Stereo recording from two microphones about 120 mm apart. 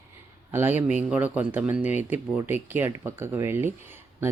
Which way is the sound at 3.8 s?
15° right (ahead or behind).